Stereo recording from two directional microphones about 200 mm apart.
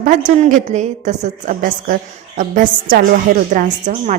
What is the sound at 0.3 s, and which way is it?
A woman's voice, 40° right (ahead or behind).